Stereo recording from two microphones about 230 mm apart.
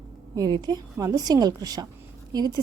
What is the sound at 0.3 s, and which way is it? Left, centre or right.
A woman's voice, centre.